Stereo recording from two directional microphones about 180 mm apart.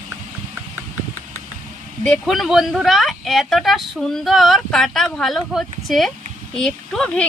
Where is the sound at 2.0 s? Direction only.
Centre (ahead or behind).